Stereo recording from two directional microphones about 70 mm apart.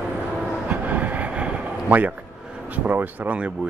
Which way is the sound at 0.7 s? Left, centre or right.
Right.